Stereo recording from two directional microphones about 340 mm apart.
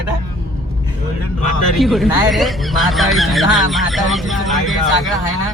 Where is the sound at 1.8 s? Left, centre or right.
Centre.